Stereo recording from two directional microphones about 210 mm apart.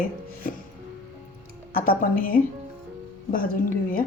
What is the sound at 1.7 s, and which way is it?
Speech, 40° left (ahead or behind).